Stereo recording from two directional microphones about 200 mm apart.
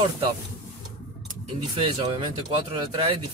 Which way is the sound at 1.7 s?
25° right (ahead or behind).